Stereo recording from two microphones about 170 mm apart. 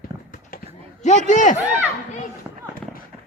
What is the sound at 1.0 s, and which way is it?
Speech, 45° left (ahead or behind).